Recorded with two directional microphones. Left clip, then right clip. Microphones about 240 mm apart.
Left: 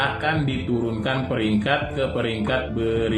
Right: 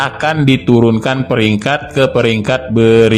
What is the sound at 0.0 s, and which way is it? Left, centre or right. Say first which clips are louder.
A man's voice: right 9 dB; right.